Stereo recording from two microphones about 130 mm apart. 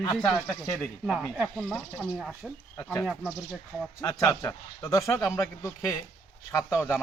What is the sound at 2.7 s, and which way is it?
Speech, 20° left (ahead or behind).